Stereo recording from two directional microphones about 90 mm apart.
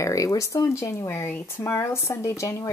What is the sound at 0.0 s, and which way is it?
Speech, 35° left (ahead or behind).